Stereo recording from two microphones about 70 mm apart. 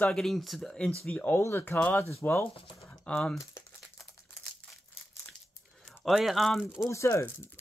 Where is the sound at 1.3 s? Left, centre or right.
Left.